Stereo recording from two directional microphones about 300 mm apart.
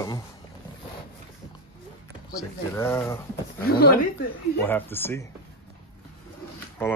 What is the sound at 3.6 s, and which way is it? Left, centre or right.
Speech, left.